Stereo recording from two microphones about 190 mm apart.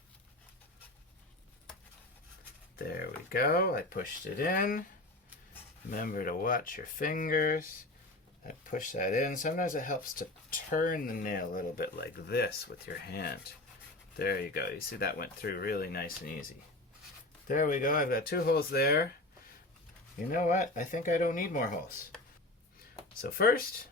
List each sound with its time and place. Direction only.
2.7 s speech: 55° left (ahead or behind)
5.9 s speech: 45° left (ahead or behind)
17.5 s speech: 45° left (ahead or behind)
20.3 s speech: 40° left (ahead or behind)
23.2 s speech: 50° left (ahead or behind)